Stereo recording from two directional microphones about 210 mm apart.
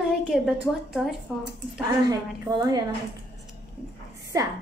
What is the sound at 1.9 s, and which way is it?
Speech, 15° right (ahead or behind).